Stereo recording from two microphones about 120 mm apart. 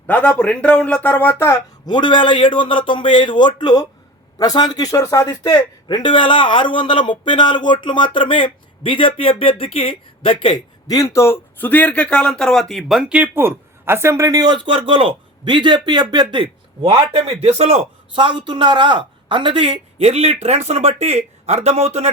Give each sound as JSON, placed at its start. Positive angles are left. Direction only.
{"t": 0.1, "sound": "speech", "side_deg": 10}
{"t": 1.9, "sound": "speech", "side_deg": 40}
{"t": 10.8, "sound": "a man's voice", "side_deg": 30}
{"t": 18.1, "sound": "speech", "side_deg": -45}